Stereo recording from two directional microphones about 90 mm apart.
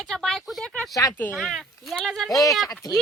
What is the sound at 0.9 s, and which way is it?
Speech, 40° left (ahead or behind).